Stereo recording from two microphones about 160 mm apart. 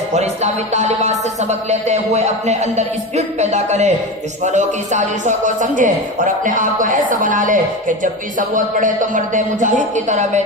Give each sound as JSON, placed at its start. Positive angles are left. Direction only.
{"t": 0.1, "sound": "a man's voice", "side_deg": -45}